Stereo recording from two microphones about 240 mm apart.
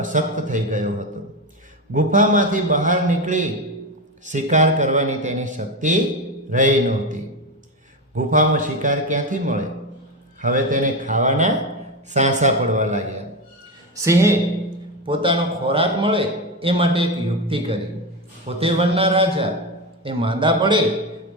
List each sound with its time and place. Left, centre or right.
0.0 s a man's voice: right
13.9 s a man's voice: centre